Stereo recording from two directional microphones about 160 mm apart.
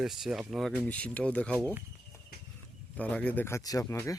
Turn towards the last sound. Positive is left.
turn(degrees=20)  # may be behind; listen again after turning